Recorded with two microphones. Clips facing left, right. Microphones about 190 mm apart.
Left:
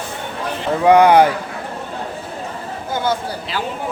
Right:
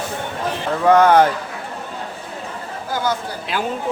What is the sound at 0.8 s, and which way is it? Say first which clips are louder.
Speech: left 2 dB; 15° left (ahead or behind).